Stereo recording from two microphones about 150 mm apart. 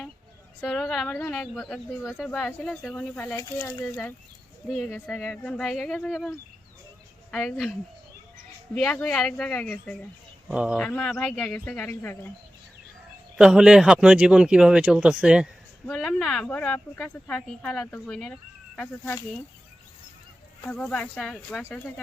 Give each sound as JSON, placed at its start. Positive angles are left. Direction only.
{"t": 0.6, "sound": "a woman's voice", "side_deg": 0}
{"t": 3.3, "sound": "speech", "side_deg": 20}
{"t": 4.7, "sound": "a woman's voice", "side_deg": 0}
{"t": 7.3, "sound": "a woman's voice", "side_deg": 0}
{"t": 10.5, "sound": "speech", "side_deg": -10}
{"t": 10.8, "sound": "a woman's voice", "side_deg": 5}
{"t": 13.3, "sound": "a woman's voice", "side_deg": -5}
{"t": 18.8, "sound": "speech", "side_deg": 15}
{"t": 20.6, "sound": "speech", "side_deg": 10}